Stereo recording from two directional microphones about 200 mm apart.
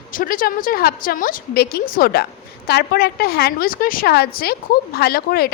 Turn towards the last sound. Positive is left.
turn(degrees=50)  # may be behind; listen again after turning